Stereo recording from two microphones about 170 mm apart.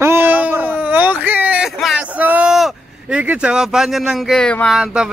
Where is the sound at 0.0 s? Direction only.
15° right (ahead or behind).